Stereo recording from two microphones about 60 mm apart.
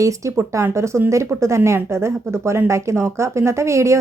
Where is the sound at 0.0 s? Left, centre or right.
Right.